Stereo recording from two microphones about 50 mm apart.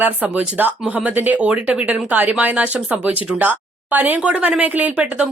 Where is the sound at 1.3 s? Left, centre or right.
Right.